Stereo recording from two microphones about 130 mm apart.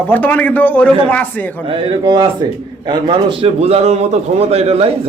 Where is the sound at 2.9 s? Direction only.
40° right (ahead or behind).